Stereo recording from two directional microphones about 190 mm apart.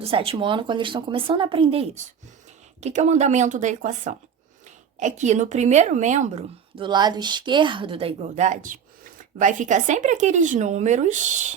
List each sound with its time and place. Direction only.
0.0 s a woman's voice: 30° right (ahead or behind)
6.8 s a woman's voice: 25° right (ahead or behind); by 11.5 s 40° right (ahead or behind)